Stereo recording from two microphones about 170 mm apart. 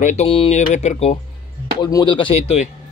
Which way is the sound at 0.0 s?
40° left (ahead or behind).